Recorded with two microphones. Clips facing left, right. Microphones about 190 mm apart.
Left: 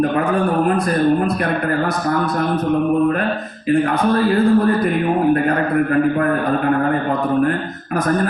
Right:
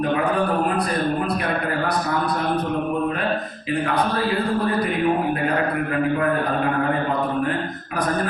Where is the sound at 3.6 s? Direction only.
45° left (ahead or behind).